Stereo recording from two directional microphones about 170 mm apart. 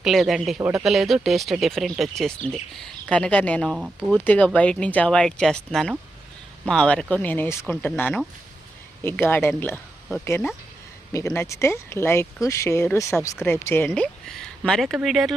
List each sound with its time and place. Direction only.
0.0 s speech: centre (ahead or behind)
4.1 s speech: 10° left (ahead or behind)
11.1 s speech: 15° left (ahead or behind); by 15.4 s centre (ahead or behind)